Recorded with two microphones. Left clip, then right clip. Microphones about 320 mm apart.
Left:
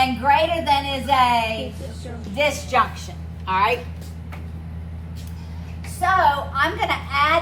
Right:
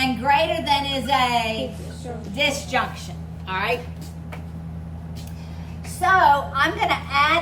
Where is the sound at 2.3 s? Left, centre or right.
Centre.